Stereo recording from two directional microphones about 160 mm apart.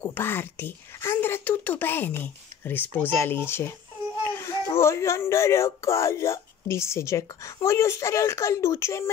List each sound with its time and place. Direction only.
0.1 s speech: 15° left (ahead or behind)